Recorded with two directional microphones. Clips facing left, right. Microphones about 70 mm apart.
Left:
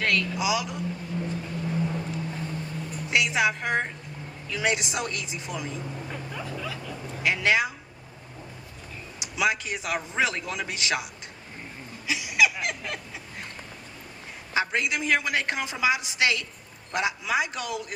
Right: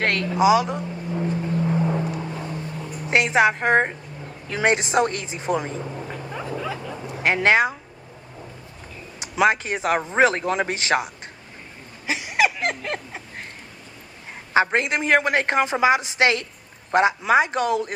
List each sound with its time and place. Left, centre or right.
0.0 s a sound: right
3.1 s speech: right
5.9 s vehicle: right
7.2 s a woman's voice: right
9.1 s speech: right
12.0 s a sound: right
14.5 s speech: right